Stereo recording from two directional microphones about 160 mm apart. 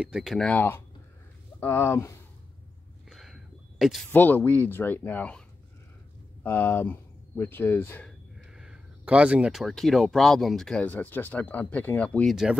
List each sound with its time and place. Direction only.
0.0 s speech: 5° right (ahead or behind); by 2.1 s 15° left (ahead or behind)
3.1 s a sound: centre (ahead or behind)
4.1 s speech: 10° left (ahead or behind)
6.4 s speech: 15° left (ahead or behind)
8.5 s speech: 5° right (ahead or behind)